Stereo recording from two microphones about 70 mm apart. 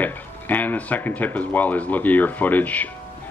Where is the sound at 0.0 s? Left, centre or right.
Left.